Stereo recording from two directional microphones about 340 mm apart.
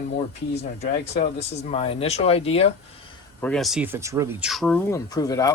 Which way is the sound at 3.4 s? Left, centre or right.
Centre.